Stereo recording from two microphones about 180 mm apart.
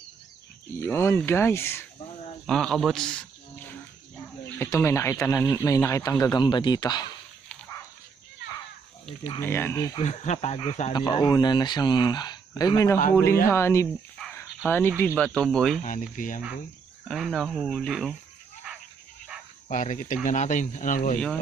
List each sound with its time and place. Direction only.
0.7 s speech: 15° left (ahead or behind)
2.5 s speech: 5° left (ahead or behind); by 7.1 s 25° left (ahead or behind)
9.4 s speech: 15° left (ahead or behind)
10.0 s speech: 40° left (ahead or behind)
10.9 s speech: 25° left (ahead or behind)
14.2 s a sound: 5° left (ahead or behind)
14.6 s speech: 10° left (ahead or behind)
15.5 s speech: centre (ahead or behind)
15.8 s speech: 45° left (ahead or behind)
17.1 s speech: centre (ahead or behind)
19.6 s speech: 45° left (ahead or behind)